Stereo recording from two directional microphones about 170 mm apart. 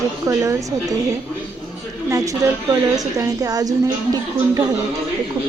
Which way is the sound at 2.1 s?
20° right (ahead or behind).